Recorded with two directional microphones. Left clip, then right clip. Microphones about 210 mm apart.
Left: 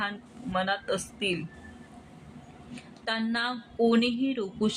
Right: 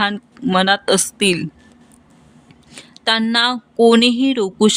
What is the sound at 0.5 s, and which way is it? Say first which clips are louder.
Speech: right 14 dB; 50° right (ahead or behind).